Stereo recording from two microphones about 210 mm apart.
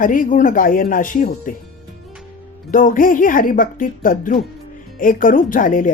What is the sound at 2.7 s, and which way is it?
Speech, 40° left (ahead or behind).